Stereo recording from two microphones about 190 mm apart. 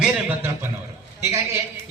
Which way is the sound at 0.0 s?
10° right (ahead or behind).